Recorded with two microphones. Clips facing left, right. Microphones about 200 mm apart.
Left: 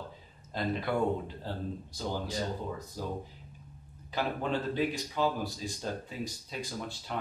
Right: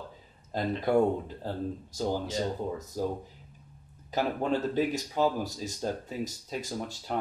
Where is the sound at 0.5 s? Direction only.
40° right (ahead or behind).